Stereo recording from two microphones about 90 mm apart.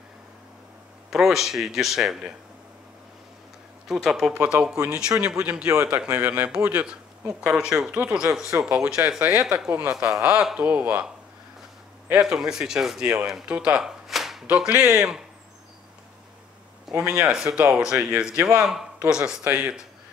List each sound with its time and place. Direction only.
1.1 s a man's voice: 5° right (ahead or behind)
3.8 s speech: 5° right (ahead or behind); by 6.9 s 20° right (ahead or behind)
7.3 s speech: 10° right (ahead or behind)
12.1 s speech: 10° right (ahead or behind)
16.9 s a sound: 5° right (ahead or behind)
17.2 s speech: 5° right (ahead or behind)